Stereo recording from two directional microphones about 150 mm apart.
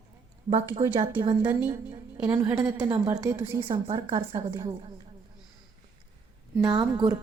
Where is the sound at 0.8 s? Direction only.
40° right (ahead or behind).